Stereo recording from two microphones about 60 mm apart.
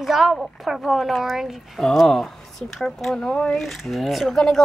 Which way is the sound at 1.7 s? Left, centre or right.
Centre.